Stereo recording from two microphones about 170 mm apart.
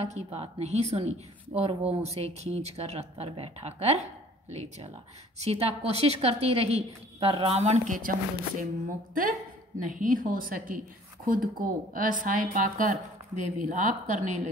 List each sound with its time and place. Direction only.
0.0 s a woman's voice: 40° right (ahead or behind)
9.8 s speech: 50° right (ahead or behind)